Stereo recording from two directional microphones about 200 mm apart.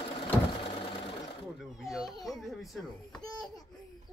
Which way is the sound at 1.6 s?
Centre (ahead or behind).